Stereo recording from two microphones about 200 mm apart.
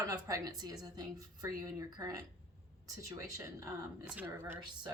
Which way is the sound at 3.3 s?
15° right (ahead or behind).